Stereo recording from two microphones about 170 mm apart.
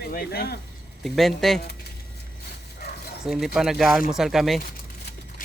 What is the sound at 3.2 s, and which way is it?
Speech, centre (ahead or behind).